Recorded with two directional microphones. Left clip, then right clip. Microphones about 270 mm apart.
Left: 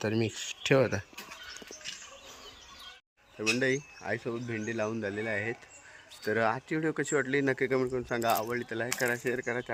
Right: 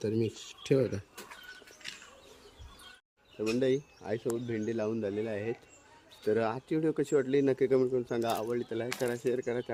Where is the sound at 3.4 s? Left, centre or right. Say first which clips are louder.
Left 1 dB; centre.